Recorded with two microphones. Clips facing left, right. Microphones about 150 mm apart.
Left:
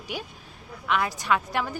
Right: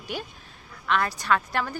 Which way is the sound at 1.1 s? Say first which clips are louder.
Even; 15° left (ahead or behind).